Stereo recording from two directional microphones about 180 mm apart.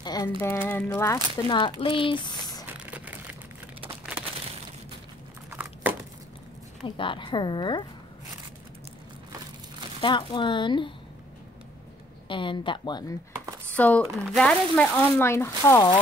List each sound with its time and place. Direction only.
0.0 s a sound: 20° left (ahead or behind)
0.4 s speech: 10° left (ahead or behind)
2.8 s a sound: 5° right (ahead or behind)
5.5 s crumpling: 10° right (ahead or behind)
7.0 s speech: 25° left (ahead or behind)
10.0 s speech: 25° left (ahead or behind)
12.3 s speech: 25° left (ahead or behind)
13.7 s speech: 10° left (ahead or behind)